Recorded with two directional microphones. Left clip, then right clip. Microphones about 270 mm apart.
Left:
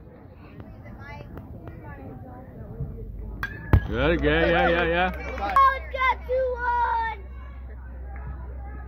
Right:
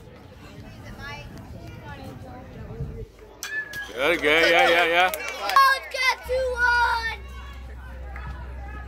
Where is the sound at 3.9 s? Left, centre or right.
Centre.